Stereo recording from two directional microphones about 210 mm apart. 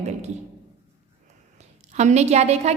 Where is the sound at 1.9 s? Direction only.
35° right (ahead or behind).